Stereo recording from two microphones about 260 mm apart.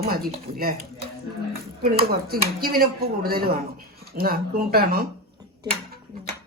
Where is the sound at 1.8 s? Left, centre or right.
Right.